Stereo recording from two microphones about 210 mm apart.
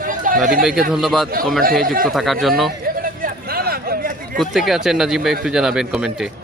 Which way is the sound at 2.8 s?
40° right (ahead or behind).